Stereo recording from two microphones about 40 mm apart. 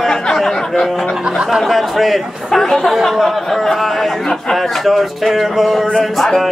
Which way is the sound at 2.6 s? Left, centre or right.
Centre.